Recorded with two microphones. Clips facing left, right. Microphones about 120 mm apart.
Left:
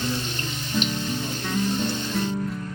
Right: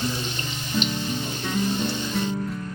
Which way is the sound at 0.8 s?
5° right (ahead or behind).